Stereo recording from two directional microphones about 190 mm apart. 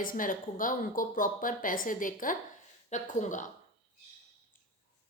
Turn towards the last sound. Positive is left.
turn(degrees=40)  # may be behind; listen again after turning